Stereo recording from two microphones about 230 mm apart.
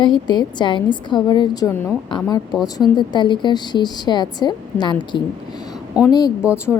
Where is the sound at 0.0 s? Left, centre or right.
Centre.